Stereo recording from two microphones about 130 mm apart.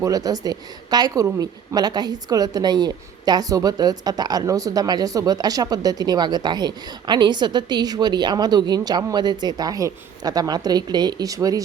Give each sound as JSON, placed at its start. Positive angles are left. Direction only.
{"t": 0.0, "sound": "a woman's voice", "side_deg": -30}